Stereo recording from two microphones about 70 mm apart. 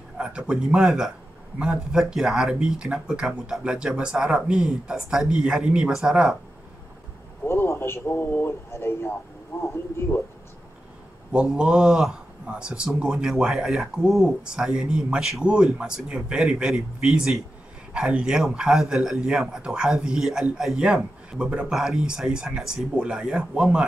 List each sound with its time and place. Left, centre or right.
0.2 s speech: centre
7.4 s speech: left
11.3 s speech: centre